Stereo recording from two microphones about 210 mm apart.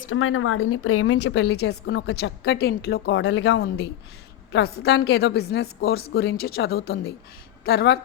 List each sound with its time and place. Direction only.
0.1 s a woman's voice: 80° left; by 7.9 s 50° left (ahead or behind)